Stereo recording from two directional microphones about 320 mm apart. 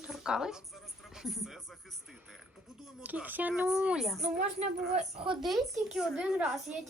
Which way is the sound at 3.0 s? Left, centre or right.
Centre.